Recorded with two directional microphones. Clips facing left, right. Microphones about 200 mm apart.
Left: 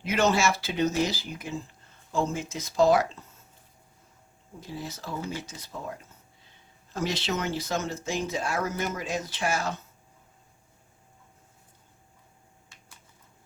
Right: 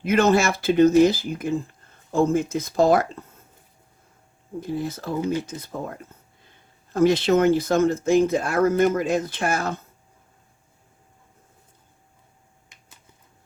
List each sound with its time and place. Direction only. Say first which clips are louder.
0.0 s speech: right 6 dB; 55° right (ahead or behind)
4.6 s speech: right 9 dB; 55° right (ahead or behind)